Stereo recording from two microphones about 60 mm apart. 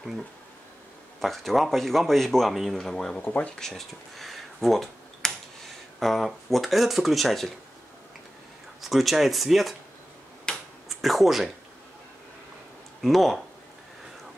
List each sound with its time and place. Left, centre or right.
1.2 s speech: centre
3.3 s speech: centre
3.5 s speech: centre
8.8 s speech: centre
10.5 s tick-tock: centre
13.0 s speech: centre